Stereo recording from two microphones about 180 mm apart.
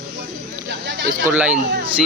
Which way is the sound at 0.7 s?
70° right (ahead or behind).